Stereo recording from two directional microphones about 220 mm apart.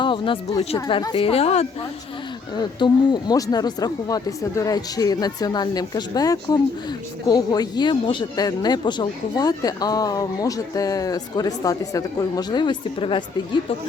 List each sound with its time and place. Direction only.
0.0 s speech: 20° left (ahead or behind)